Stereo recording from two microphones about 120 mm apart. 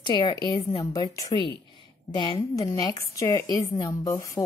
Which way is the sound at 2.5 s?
30° left (ahead or behind).